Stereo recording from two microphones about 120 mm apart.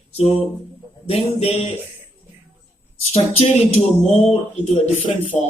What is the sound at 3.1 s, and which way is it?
Speech, 60° left (ahead or behind).